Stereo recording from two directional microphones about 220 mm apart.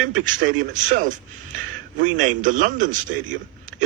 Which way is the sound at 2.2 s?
35° right (ahead or behind).